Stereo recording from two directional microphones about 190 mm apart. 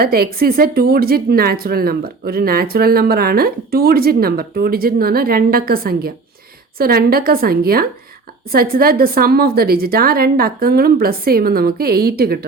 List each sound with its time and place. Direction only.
0.0 s speech: 50° right (ahead or behind)